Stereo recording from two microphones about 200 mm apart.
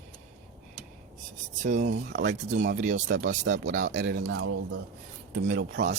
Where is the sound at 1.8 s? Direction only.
55° right (ahead or behind).